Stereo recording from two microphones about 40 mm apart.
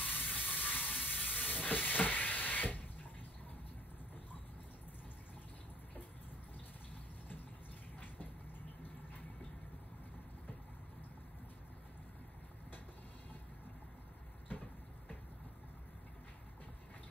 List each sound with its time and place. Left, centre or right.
0.0 s ratchet: left